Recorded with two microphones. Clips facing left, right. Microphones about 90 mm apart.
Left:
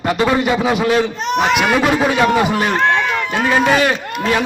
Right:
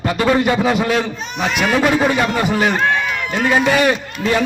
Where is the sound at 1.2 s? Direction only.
85° left.